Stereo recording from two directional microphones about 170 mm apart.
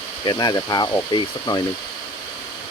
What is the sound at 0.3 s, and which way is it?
Speech, 25° left (ahead or behind).